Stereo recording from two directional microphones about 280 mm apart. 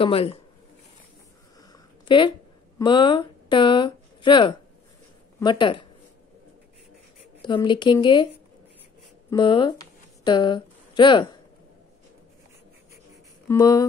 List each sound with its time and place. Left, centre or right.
0.0 s speech: centre
1.7 s a sound: centre
2.8 s speech: centre
7.4 s speech: centre
9.3 s speech: centre
13.5 s speech: centre